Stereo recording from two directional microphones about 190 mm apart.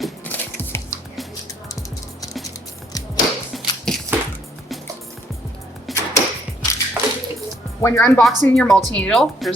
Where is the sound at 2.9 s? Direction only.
20° left (ahead or behind).